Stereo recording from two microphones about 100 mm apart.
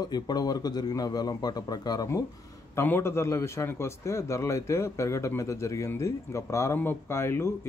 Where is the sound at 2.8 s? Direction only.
25° left (ahead or behind).